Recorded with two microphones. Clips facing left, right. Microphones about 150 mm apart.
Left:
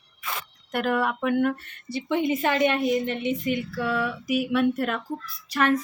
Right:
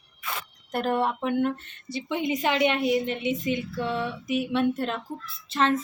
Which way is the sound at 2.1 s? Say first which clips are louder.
Left 2 dB; 15° right (ahead or behind).